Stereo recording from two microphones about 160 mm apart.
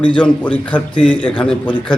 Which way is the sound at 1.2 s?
10° left (ahead or behind).